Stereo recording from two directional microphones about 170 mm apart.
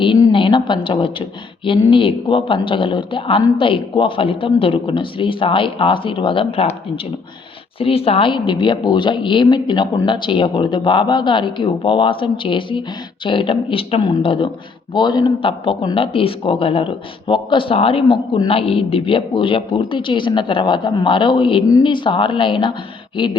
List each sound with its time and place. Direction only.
0.0 s a woman's voice: 30° left (ahead or behind)
7.8 s speech: 35° left (ahead or behind)